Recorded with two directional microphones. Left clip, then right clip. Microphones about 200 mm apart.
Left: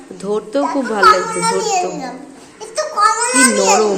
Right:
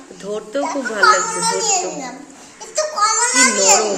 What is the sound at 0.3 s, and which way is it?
Speech, 20° left (ahead or behind).